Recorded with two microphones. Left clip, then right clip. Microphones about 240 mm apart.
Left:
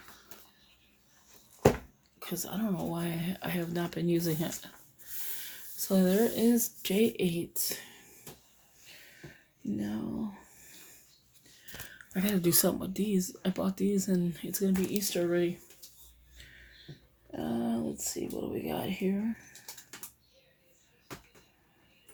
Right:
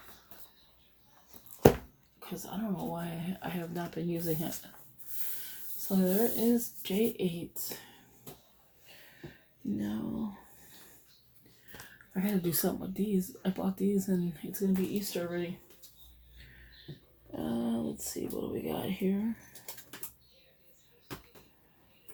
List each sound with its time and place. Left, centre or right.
2.1 s speech: left
5.9 s speech: left
9.7 s speech: left
11.7 s speech: left
16.4 s a sound: left
17.3 s a sound: left